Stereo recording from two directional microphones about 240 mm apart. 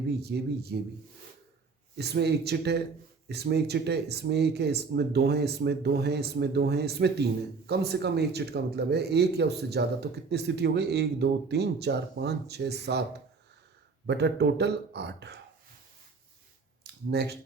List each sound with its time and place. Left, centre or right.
0.2 s speech: right
2.0 s speech: right
14.1 s speech: right
16.8 s a sound: right